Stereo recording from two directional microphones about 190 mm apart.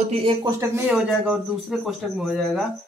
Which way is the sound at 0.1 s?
30° right (ahead or behind).